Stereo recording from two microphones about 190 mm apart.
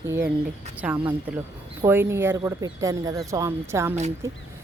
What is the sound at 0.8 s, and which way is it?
Speech, 5° right (ahead or behind).